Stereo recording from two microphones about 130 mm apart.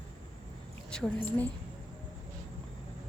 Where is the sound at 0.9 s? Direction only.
10° left (ahead or behind).